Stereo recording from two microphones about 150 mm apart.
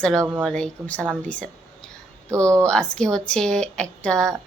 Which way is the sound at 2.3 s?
20° right (ahead or behind).